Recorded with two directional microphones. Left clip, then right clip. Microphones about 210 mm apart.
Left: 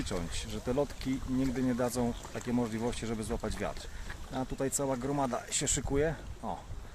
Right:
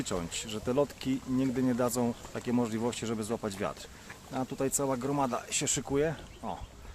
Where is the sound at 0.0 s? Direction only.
20° right (ahead or behind).